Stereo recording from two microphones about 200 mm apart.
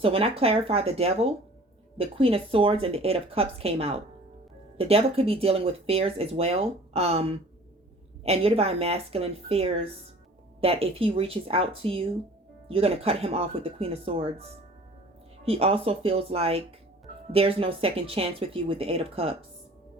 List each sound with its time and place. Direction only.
0.0 s speech: 30° right (ahead or behind)
15.4 s speech: 30° right (ahead or behind)